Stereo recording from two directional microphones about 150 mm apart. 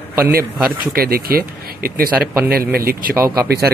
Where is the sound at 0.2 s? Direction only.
85° right.